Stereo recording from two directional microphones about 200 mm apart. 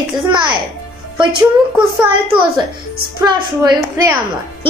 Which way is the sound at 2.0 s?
25° right (ahead or behind).